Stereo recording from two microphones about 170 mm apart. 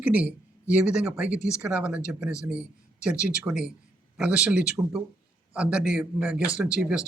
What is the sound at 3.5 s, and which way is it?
Speech, 5° right (ahead or behind).